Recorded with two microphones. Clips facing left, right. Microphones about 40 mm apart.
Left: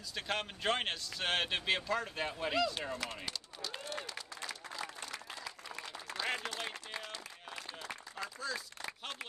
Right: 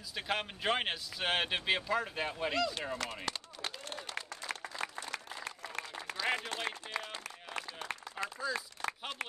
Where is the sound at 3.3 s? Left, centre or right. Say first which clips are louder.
Right 2 dB; right.